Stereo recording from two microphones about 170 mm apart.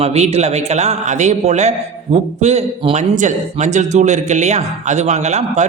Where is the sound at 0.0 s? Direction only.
40° right (ahead or behind).